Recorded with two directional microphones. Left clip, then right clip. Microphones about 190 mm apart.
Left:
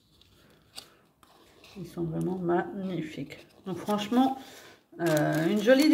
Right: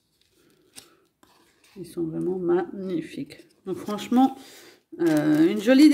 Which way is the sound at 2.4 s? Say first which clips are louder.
Right 3 dB; 45° right (ahead or behind).